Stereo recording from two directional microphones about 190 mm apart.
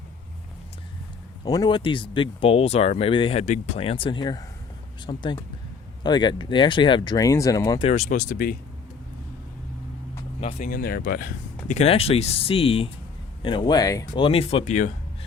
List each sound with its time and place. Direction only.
1.5 s speech: 20° left (ahead or behind)
7.9 s speech: 35° left (ahead or behind)
8.3 s speech: 50° left (ahead or behind)
10.7 s speech: 50° left (ahead or behind)
11.7 s speech: 35° left (ahead or behind)
14.3 s speech: 30° left (ahead or behind)